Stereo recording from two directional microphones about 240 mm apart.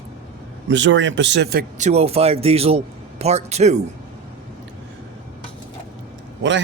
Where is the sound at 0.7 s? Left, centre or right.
Right.